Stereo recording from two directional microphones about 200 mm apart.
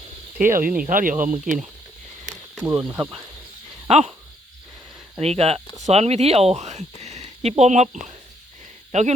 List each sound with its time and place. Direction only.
0.4 s speech: 45° right (ahead or behind)
2.8 s speech: 10° right (ahead or behind)
3.8 s speech: 30° right (ahead or behind)
5.2 s speech: 30° right (ahead or behind)
7.0 s a sound: 35° right (ahead or behind)
8.9 s speech: 35° right (ahead or behind)